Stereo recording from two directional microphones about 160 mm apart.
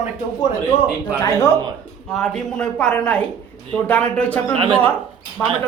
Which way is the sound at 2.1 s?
5° left (ahead or behind).